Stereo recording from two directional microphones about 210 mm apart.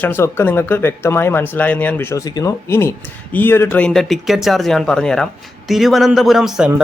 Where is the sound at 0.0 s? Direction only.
10° left (ahead or behind).